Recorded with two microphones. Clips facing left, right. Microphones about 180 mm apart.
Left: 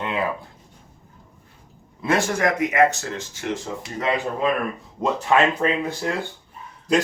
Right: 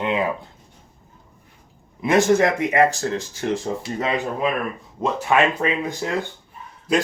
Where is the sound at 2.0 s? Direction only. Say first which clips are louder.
Right 5 dB; 20° right (ahead or behind); by 3.6 s 35° right (ahead or behind).